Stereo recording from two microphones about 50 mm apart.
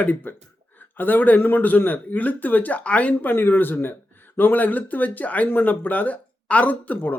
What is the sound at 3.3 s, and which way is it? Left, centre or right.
Speech, left.